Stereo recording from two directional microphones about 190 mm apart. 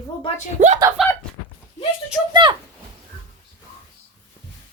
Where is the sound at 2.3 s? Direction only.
25° right (ahead or behind).